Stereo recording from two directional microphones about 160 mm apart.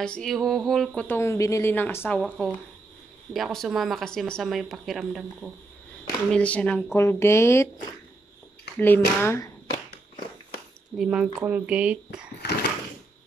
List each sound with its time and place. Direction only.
0.0 s speech: 5° left (ahead or behind)
1.0 s speech: 15° left (ahead or behind)
8.7 s speech: 10° left (ahead or behind)
11.0 s speech: 5° right (ahead or behind)